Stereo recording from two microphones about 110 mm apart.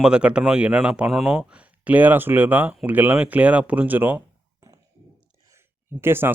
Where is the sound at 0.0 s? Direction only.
10° right (ahead or behind).